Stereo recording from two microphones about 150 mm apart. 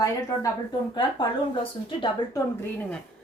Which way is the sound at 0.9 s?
35° left (ahead or behind).